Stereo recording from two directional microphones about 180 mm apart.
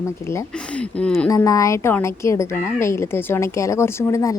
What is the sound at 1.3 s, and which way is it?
Speech, 20° left (ahead or behind).